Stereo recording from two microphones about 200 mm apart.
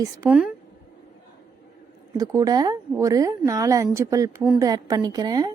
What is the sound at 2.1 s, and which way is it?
A woman's voice, 15° right (ahead or behind).